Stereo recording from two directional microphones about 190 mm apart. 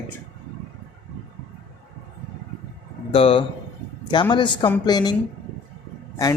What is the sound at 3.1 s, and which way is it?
A woman's voice, 30° left (ahead or behind).